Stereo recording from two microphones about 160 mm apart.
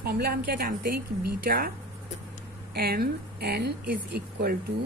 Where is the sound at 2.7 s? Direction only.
75° right (ahead or behind).